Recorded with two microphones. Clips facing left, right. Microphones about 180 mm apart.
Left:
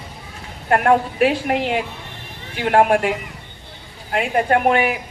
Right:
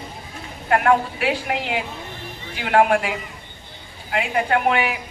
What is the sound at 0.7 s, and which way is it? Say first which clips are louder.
A man's voice: left 2 dB; 45° left (ahead or behind).